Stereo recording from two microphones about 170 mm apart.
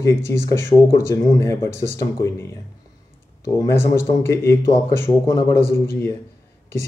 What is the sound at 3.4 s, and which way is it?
Speech, 15° left (ahead or behind).